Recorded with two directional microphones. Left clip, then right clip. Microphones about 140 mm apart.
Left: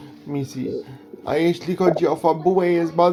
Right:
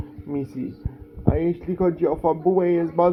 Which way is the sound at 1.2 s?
20° left (ahead or behind).